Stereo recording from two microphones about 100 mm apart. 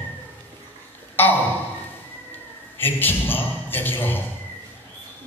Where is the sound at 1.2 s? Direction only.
20° left (ahead or behind).